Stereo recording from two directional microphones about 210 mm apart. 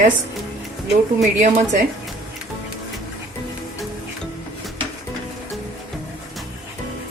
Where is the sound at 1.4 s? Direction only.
35° right (ahead or behind).